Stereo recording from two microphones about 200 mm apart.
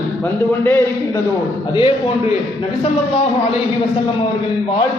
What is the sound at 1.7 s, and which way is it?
Speech, 25° left (ahead or behind).